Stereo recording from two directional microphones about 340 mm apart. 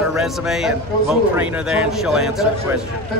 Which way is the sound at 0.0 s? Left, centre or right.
Centre.